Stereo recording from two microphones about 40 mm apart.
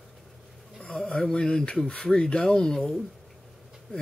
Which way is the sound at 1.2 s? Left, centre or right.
Centre.